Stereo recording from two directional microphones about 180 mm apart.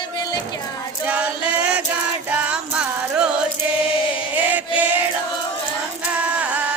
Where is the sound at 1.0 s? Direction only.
5° right (ahead or behind).